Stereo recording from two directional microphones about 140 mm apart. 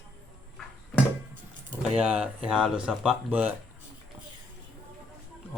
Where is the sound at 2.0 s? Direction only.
10° right (ahead or behind).